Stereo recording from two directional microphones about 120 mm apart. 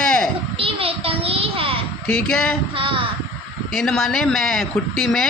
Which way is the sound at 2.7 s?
45° right (ahead or behind).